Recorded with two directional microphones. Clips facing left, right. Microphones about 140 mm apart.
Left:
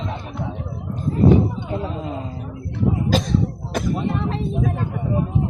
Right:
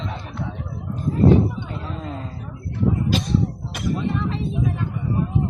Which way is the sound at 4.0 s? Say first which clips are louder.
Left 1 dB; 40° left (ahead or behind).